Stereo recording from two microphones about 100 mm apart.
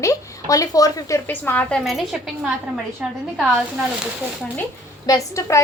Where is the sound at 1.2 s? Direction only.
20° left (ahead or behind).